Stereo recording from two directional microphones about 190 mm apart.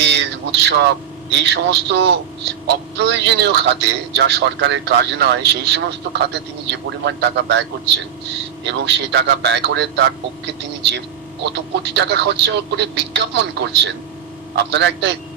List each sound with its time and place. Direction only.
0.0 s a man's voice: 65° right (ahead or behind)
11.5 s speech: 65° right (ahead or behind)
14.5 s a man's voice: 65° right (ahead or behind)